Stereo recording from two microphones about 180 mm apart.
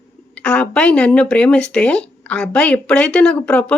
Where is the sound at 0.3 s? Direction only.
5° left (ahead or behind).